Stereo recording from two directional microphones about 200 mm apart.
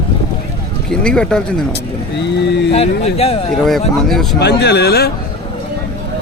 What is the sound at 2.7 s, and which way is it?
Speech, 30° left (ahead or behind).